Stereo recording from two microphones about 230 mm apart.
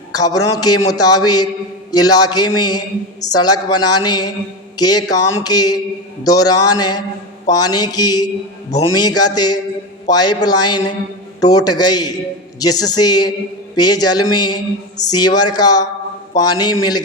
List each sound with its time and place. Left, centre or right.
0.1 s speech: centre
2.6 s mantra: centre
3.2 s speech: centre